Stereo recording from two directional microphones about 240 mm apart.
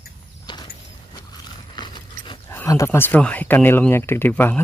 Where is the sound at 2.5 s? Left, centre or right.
Centre.